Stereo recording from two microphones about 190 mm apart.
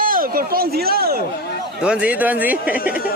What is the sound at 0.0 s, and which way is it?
Speech, 50° right (ahead or behind).